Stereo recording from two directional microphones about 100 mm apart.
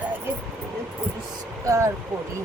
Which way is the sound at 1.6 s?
30° right (ahead or behind).